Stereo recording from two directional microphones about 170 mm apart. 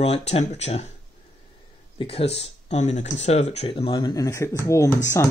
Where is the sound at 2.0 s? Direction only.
35° left (ahead or behind).